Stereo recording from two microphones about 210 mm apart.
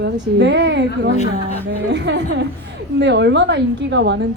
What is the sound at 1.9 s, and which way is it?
A woman's voice, 55° right (ahead or behind).